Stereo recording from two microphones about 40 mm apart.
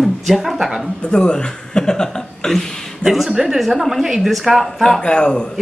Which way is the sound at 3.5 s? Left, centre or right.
Centre.